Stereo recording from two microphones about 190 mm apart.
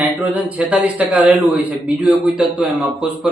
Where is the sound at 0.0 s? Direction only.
10° right (ahead or behind).